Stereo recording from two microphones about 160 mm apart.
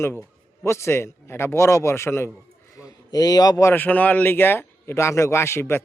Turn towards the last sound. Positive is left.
turn(degrees=15)  # may be behind; listen again after turning